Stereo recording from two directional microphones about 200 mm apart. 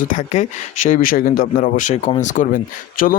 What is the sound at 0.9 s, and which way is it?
Speech, 45° left (ahead or behind).